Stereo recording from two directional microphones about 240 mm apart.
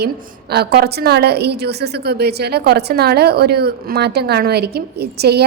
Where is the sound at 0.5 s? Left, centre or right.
Right.